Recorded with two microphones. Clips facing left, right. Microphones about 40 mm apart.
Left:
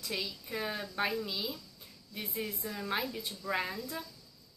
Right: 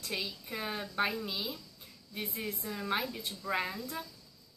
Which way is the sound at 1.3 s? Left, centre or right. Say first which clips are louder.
Even; centre.